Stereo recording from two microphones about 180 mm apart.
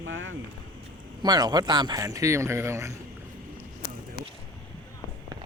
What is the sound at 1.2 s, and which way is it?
Speech, 20° right (ahead or behind).